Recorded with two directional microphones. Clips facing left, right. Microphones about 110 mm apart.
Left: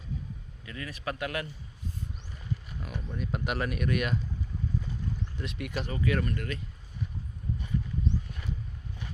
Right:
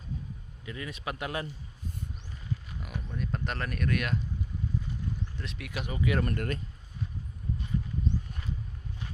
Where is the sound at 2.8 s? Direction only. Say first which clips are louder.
Even; centre (ahead or behind).